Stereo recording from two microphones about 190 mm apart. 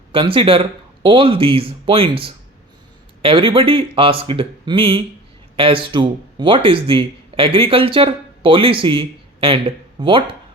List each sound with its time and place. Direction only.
0.1 s speech: 25° right (ahead or behind)